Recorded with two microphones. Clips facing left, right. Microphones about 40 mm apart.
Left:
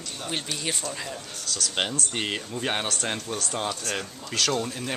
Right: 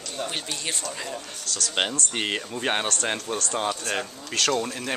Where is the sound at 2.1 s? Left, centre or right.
Centre.